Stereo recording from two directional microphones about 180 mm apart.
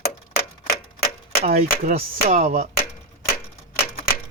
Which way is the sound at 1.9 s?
35° right (ahead or behind).